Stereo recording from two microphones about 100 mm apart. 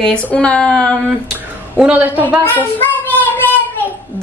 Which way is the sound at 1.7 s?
15° right (ahead or behind).